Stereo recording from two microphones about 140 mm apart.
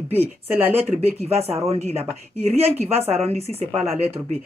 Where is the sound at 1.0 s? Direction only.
50° right (ahead or behind).